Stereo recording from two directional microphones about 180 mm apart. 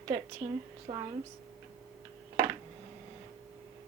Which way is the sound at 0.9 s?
30° right (ahead or behind).